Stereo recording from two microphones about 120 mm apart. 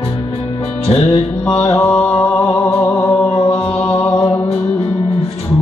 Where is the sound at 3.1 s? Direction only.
35° left (ahead or behind).